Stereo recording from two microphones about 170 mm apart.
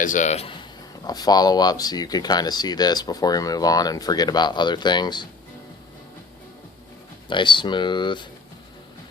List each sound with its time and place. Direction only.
0.0 s speech: 50° left (ahead or behind); by 5.3 s 25° left (ahead or behind)
7.3 s speech: 30° left (ahead or behind)